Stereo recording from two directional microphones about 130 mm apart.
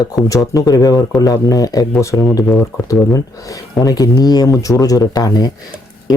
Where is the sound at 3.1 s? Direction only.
30° left (ahead or behind).